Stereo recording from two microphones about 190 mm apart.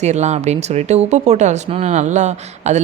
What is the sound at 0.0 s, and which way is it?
Speech, 35° right (ahead or behind).